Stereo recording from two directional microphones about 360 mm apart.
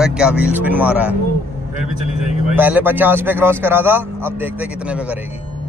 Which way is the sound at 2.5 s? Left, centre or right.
Centre.